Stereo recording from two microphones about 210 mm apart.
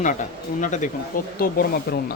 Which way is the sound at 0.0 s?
35° left (ahead or behind).